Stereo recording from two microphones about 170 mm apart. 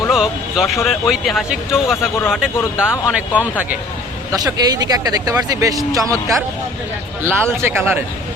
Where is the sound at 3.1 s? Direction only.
10° right (ahead or behind).